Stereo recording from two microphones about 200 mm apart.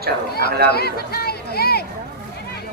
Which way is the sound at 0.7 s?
50° left (ahead or behind).